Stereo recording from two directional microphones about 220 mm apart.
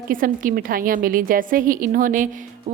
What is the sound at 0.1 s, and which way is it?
Speech, 40° right (ahead or behind).